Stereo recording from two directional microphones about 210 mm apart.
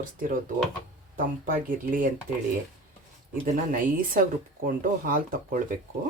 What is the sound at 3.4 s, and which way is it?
Speech, 40° right (ahead or behind).